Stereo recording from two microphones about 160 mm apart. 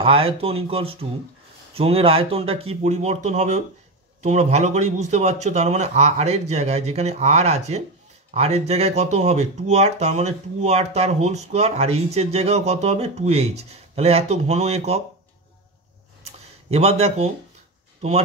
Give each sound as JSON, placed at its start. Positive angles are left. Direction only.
{"t": 0.0, "sound": "speech", "side_deg": -35}
{"t": 16.7, "sound": "speech", "side_deg": -40}